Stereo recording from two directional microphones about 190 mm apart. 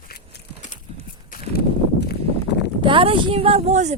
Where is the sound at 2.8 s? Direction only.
25° right (ahead or behind).